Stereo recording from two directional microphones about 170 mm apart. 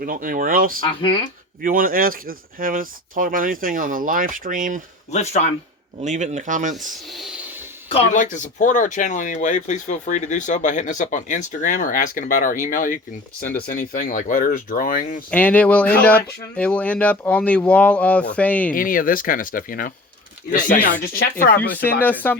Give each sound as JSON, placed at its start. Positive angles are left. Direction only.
{"t": 0.0, "sound": "speech", "side_deg": -55}
{"t": 5.1, "sound": "speech", "side_deg": 40}
{"t": 6.0, "sound": "speech", "side_deg": -45}
{"t": 6.9, "sound": "a sound", "side_deg": 0}
{"t": 8.1, "sound": "speech", "side_deg": 50}
{"t": 15.3, "sound": "speech", "side_deg": 10}
{"t": 18.7, "sound": "speech", "side_deg": 55}
{"t": 21.2, "sound": "speech", "side_deg": 55}
{"t": 22.0, "sound": "speech", "side_deg": 10}